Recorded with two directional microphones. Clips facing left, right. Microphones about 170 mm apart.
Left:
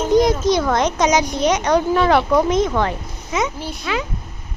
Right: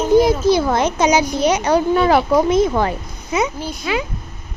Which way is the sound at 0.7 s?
5° right (ahead or behind).